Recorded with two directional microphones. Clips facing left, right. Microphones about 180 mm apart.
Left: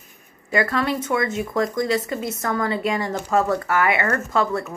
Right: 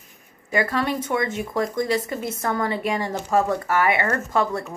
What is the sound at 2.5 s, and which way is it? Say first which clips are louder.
Speech: left 2 dB; 25° right (ahead or behind).